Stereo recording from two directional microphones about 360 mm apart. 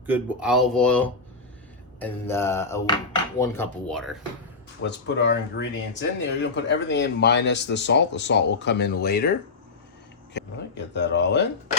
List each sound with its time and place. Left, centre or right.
0.0 s speech: centre
2.0 s music: centre
3.3 s speech: centre
4.8 s speech: left
10.3 s speech: left